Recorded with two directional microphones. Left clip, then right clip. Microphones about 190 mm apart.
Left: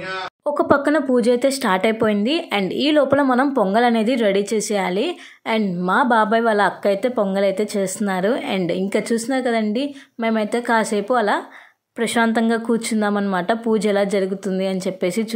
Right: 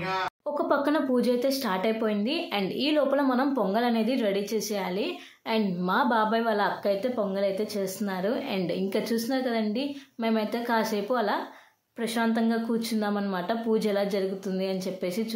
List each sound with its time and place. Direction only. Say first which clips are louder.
0.8 s a woman's voice: left 8 dB; 30° left (ahead or behind)